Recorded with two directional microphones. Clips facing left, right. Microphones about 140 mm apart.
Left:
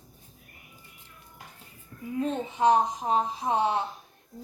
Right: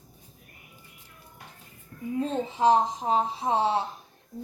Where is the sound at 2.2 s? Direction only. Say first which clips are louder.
Even; 30° right (ahead or behind).